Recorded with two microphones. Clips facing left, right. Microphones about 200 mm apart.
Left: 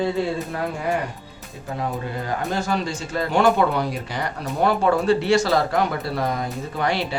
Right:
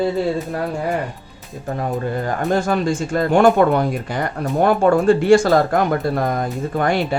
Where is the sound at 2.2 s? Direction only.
50° right (ahead or behind).